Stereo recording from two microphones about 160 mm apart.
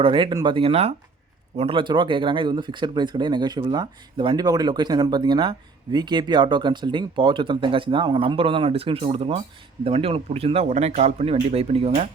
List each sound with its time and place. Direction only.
0.0 s speech: 30° right (ahead or behind)